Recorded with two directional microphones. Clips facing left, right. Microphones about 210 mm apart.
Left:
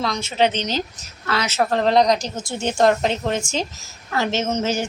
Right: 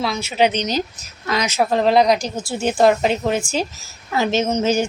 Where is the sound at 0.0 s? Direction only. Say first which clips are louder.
Right 2 dB; 5° right (ahead or behind).